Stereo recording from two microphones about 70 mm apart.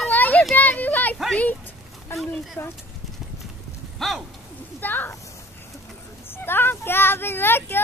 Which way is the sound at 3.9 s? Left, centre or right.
Centre.